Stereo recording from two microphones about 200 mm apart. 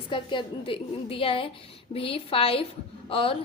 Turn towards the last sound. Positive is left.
turn(degrees=25)  # may be behind; listen again after turning